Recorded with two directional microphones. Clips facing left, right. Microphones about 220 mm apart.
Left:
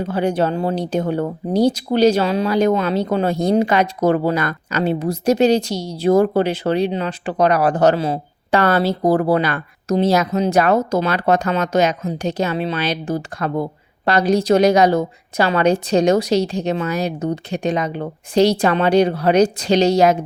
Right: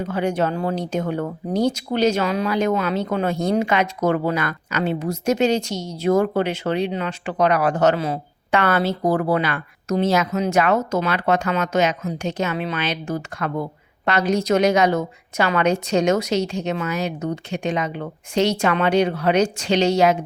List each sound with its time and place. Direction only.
0.0 s speech: 30° left (ahead or behind)